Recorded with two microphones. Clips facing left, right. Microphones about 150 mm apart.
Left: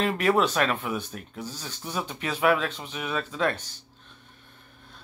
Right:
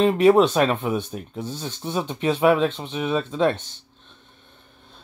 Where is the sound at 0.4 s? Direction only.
35° right (ahead or behind).